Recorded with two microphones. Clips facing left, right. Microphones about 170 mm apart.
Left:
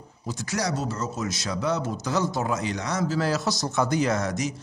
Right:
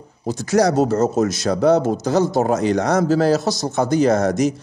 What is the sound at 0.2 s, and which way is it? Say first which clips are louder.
A man's voice: right 12 dB; 45° right (ahead or behind).